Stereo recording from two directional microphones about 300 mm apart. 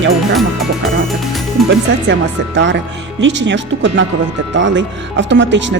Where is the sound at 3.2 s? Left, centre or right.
Right.